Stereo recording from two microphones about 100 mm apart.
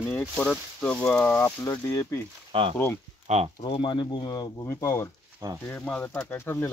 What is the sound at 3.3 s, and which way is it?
Speech, 90° right.